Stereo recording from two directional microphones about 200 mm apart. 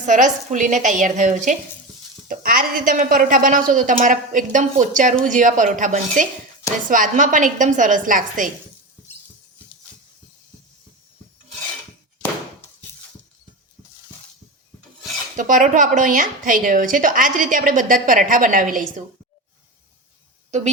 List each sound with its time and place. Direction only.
0.0 s a woman's voice: 40° right (ahead or behind)
15.4 s a woman's voice: 40° right (ahead or behind)